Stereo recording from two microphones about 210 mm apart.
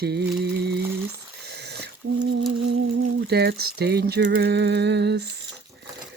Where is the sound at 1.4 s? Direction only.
50° right (ahead or behind).